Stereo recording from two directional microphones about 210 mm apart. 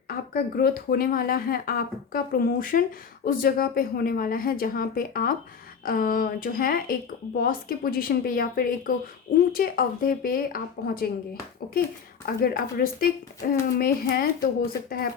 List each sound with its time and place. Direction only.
0.1 s speech: 45° left (ahead or behind)